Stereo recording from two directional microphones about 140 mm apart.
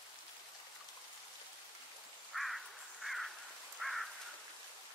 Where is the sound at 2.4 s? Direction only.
Centre (ahead or behind).